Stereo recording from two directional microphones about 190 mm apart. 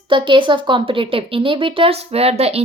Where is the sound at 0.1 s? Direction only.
25° right (ahead or behind).